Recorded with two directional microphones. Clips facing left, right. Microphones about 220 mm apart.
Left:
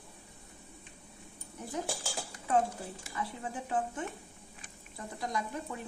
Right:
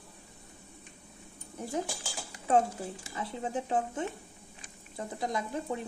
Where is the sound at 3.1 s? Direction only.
25° right (ahead or behind).